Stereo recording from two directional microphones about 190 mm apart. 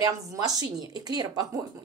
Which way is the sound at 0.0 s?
20° right (ahead or behind).